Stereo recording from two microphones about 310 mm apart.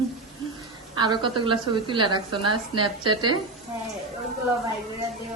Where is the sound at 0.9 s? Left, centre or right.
Centre.